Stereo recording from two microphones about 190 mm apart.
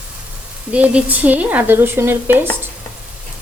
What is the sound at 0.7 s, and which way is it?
A woman's voice, 5° right (ahead or behind).